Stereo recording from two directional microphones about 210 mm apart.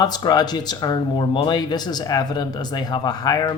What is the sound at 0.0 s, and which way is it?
A woman's voice, 20° left (ahead or behind).